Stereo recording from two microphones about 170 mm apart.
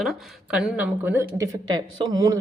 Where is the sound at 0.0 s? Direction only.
5° right (ahead or behind).